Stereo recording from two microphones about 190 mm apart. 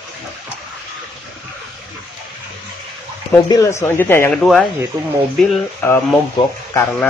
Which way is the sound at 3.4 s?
15° left (ahead or behind).